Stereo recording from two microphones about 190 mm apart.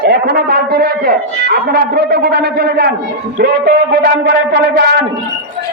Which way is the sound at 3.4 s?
60° right (ahead or behind).